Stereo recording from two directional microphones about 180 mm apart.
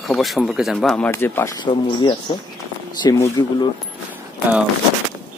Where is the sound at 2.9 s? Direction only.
20° left (ahead or behind).